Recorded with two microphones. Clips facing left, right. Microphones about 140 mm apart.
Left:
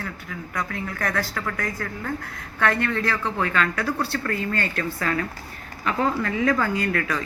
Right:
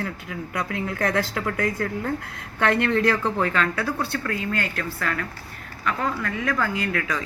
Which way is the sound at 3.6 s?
Centre (ahead or behind).